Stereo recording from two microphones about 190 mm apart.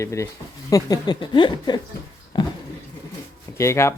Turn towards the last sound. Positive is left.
turn(degrees=15)  # may be behind; listen again after turning